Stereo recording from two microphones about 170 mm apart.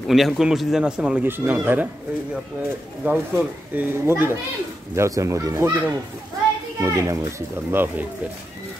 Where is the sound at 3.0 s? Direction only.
10° right (ahead or behind).